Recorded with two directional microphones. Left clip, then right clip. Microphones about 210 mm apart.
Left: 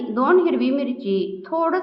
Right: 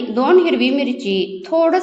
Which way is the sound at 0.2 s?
15° right (ahead or behind).